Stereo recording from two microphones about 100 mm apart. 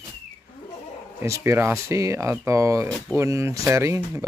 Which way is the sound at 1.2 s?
30° right (ahead or behind).